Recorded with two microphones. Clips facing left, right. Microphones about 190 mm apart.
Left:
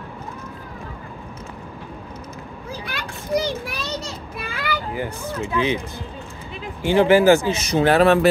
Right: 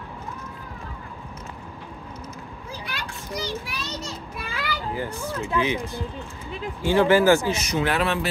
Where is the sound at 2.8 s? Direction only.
55° left (ahead or behind).